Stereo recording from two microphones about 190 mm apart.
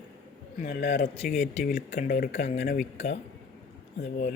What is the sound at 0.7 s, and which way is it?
Speech, 60° left (ahead or behind).